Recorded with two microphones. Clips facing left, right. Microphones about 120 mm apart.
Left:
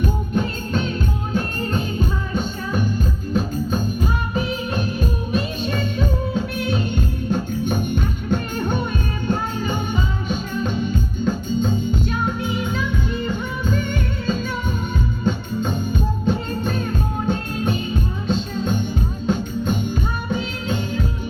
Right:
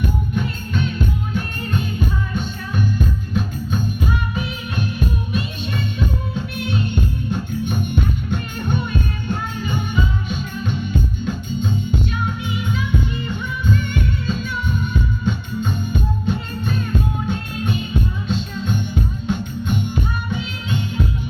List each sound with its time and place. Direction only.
0.0 s music: 35° left (ahead or behind)